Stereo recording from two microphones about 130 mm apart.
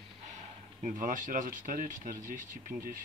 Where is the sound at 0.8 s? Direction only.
85° right.